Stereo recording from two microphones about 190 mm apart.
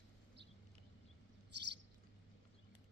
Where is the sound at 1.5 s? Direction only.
65° right (ahead or behind).